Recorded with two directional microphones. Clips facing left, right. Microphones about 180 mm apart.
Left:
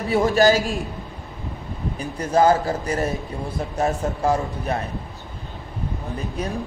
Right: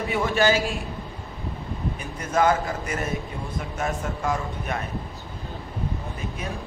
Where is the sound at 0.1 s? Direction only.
40° left (ahead or behind).